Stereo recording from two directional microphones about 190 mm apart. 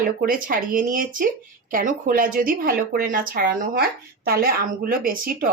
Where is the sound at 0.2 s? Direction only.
45° right (ahead or behind).